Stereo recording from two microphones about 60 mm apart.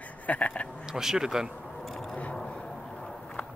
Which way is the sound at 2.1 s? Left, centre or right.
Left.